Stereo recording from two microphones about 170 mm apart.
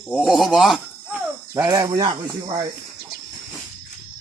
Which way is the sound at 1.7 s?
25° right (ahead or behind).